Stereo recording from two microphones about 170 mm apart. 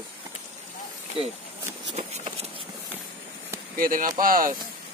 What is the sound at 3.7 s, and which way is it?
Speech, 55° right (ahead or behind).